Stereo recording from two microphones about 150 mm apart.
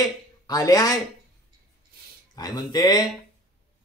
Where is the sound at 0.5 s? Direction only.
25° left (ahead or behind).